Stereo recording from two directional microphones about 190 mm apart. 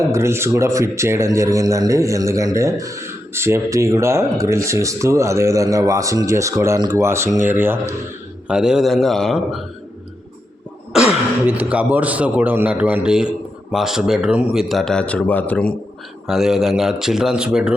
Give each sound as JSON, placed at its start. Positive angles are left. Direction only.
{"t": 0.0, "sound": "speech", "side_deg": -15}
{"t": 10.9, "sound": "speech", "side_deg": -5}